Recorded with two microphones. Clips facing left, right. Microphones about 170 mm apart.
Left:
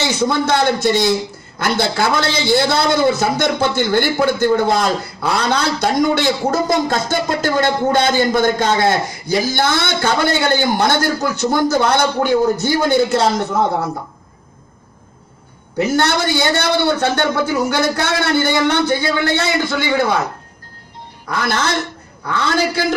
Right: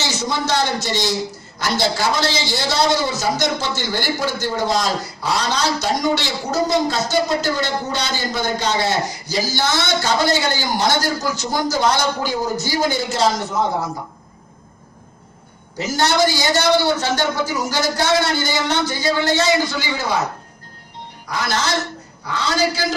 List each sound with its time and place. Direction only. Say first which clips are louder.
0.0 s a man's voice: left 6 dB; 55° left (ahead or behind)
15.8 s a man's voice: left 1 dB; 60° left (ahead or behind)
21.3 s a man's voice: left 3 dB; 55° left (ahead or behind)